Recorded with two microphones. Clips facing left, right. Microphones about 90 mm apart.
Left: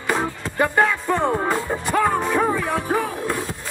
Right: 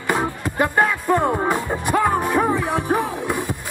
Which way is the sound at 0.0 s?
10° right (ahead or behind).